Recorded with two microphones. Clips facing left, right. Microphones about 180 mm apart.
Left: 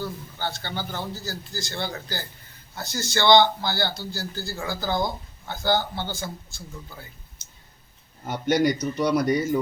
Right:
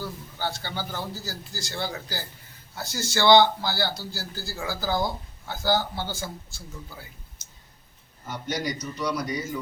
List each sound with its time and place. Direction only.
0.0 s a man's voice: 10° right (ahead or behind)
8.3 s a man's voice: 60° left (ahead or behind)